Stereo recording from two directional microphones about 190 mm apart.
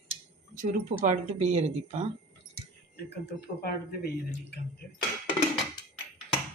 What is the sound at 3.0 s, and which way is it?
Speech, 55° left (ahead or behind).